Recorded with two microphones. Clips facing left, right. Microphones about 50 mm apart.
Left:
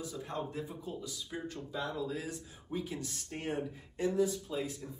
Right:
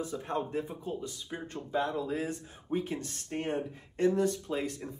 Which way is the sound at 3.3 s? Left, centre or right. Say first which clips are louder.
Right 4 dB; right.